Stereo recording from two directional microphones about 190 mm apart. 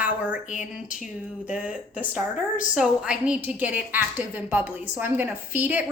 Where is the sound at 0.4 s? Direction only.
40° left (ahead or behind).